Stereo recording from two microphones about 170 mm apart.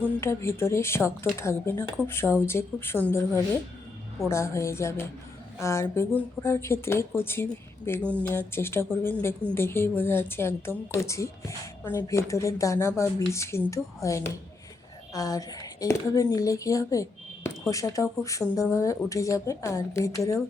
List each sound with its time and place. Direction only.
0.0 s a woman's voice: 15° left (ahead or behind)